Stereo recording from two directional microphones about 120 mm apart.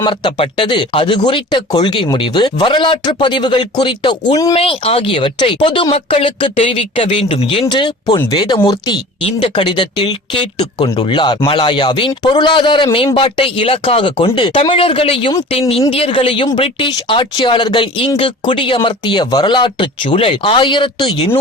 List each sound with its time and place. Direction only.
0.0 s speech: 45° left (ahead or behind)
9.2 s speech: 50° left (ahead or behind)